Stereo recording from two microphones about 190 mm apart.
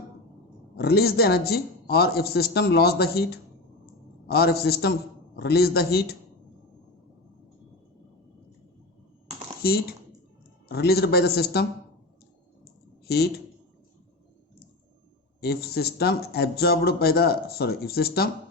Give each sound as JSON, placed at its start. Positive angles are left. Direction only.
{"t": 0.8, "sound": "speech", "side_deg": 55}
{"t": 10.7, "sound": "speech", "side_deg": 55}
{"t": 13.1, "sound": "speech", "side_deg": 55}
{"t": 15.4, "sound": "speech", "side_deg": 55}